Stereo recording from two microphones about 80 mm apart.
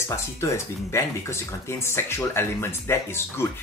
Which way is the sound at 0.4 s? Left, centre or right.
Left.